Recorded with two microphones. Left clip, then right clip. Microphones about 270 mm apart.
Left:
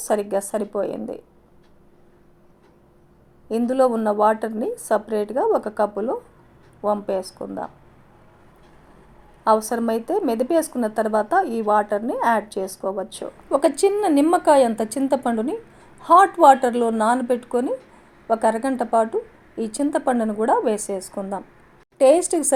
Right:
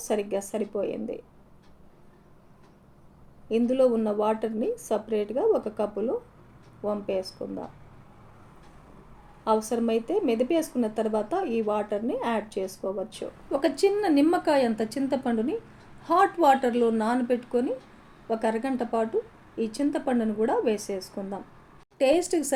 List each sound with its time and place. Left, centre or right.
0.0 s a woman's voice: left
3.5 s a woman's voice: left
9.4 s a woman's voice: left